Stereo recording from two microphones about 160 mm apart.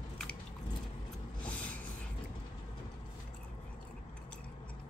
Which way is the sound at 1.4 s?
10° left (ahead or behind).